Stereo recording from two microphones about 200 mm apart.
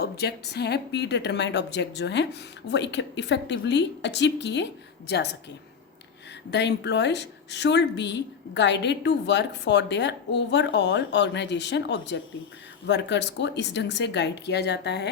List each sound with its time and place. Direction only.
0.0 s a woman's voice: 55° left (ahead or behind)
6.5 s a woman's voice: 60° left (ahead or behind)